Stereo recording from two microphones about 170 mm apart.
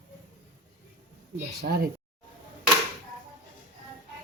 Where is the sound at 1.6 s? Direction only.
60° right (ahead or behind).